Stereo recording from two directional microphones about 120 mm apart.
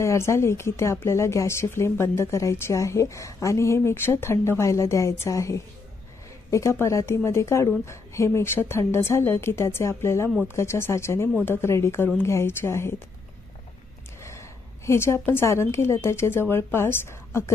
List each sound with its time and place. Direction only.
0.0 s speech: 25° left (ahead or behind)
14.9 s speech: 20° left (ahead or behind)